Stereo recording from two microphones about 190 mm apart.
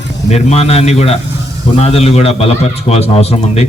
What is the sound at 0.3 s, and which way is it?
A man's voice, 35° left (ahead or behind).